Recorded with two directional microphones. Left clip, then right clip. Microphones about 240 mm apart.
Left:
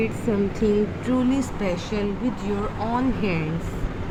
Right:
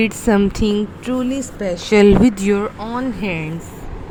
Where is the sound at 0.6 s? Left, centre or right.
Right.